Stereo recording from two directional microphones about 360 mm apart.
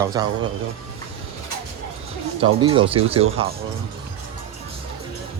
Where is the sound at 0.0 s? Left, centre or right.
Centre.